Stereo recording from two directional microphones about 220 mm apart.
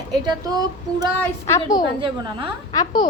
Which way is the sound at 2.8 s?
20° left (ahead or behind).